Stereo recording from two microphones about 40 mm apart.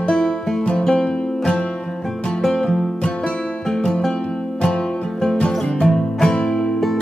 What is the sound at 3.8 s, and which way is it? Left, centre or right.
Music, centre.